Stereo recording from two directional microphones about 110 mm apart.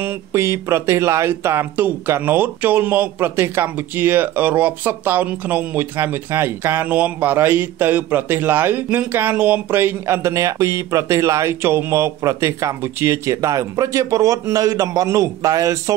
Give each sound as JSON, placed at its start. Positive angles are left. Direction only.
{"t": 0.0, "sound": "speech", "side_deg": -25}